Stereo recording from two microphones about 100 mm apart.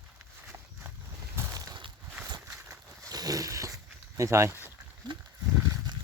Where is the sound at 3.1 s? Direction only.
40° right (ahead or behind); by 4.7 s 25° right (ahead or behind).